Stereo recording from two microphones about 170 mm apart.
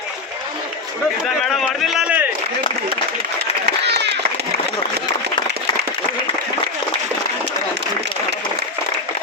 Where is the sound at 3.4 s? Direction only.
80° right.